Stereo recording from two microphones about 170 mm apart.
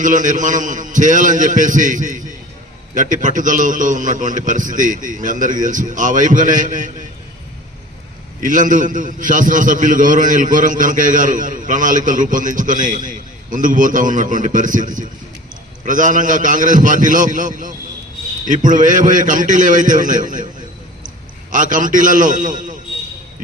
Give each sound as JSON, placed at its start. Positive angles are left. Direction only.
{"t": 0.0, "sound": "a man's voice", "side_deg": -50}
{"t": 8.4, "sound": "a man's voice", "side_deg": -50}
{"t": 21.5, "sound": "a man's voice", "side_deg": -50}